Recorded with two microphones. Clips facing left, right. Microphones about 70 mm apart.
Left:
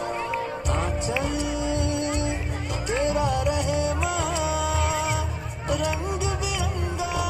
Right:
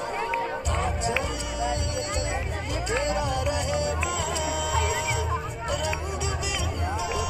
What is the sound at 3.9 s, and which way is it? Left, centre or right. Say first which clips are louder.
Music: left 2 dB; left.